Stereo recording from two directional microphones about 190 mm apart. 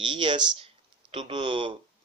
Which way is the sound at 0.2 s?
25° right (ahead or behind).